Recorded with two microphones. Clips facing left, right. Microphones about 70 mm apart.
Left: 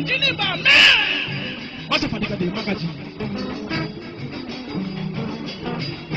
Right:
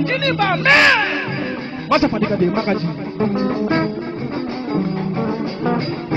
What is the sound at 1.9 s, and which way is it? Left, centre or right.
Speech, right.